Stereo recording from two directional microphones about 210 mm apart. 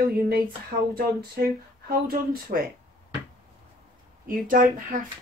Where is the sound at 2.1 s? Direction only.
45° right (ahead or behind).